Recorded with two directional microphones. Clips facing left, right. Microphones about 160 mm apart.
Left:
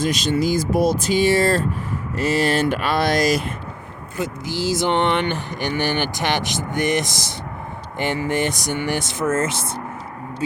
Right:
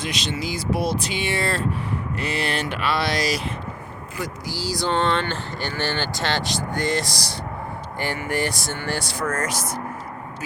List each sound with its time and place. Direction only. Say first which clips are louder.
0.0 s speech: left 8 dB; 45° left (ahead or behind)
4.2 s speech: left 6 dB; 20° left (ahead or behind)